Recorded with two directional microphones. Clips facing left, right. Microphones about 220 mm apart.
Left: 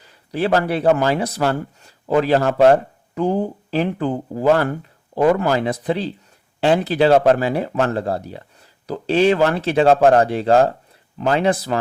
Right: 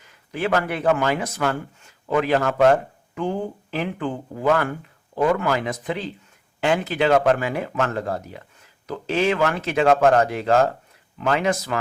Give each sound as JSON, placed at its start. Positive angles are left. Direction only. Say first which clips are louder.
{"t": 0.0, "sound": "speech", "louder": "left 4 dB", "side_deg": 35}